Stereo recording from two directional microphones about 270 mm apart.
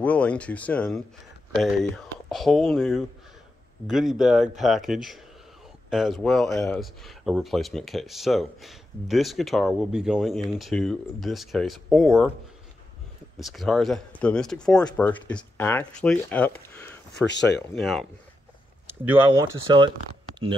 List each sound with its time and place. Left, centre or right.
0.0 s speech: centre
13.4 s speech: centre
19.3 s speech: centre